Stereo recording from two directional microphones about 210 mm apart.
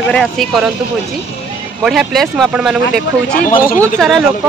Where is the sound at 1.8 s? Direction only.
Centre (ahead or behind).